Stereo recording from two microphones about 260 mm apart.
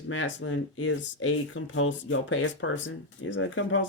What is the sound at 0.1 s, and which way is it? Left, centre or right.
Speech, left.